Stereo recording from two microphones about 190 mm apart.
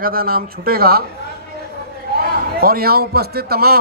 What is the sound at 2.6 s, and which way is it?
A man's voice, 50° right (ahead or behind).